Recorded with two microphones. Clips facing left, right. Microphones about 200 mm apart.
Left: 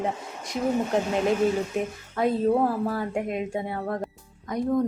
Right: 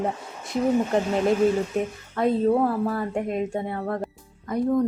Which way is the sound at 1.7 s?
5° left (ahead or behind).